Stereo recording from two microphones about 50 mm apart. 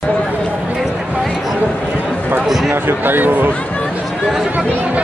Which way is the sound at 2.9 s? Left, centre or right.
Right.